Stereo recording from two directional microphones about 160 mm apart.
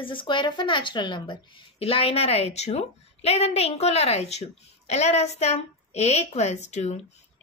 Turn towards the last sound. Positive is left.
turn(degrees=45)  # may be behind; listen again after turning